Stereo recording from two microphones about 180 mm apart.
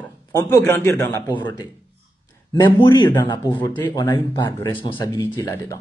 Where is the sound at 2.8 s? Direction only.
25° left (ahead or behind).